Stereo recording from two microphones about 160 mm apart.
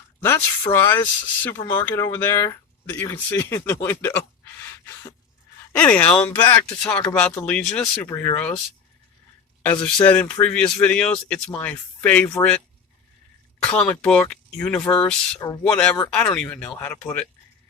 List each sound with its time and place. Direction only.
0.7 s speech: 15° left (ahead or behind)
5.7 s speech: 10° left (ahead or behind)
9.6 s speech: 10° left (ahead or behind)
15.4 s speech: 25° left (ahead or behind)
15.6 s speech: 10° left (ahead or behind)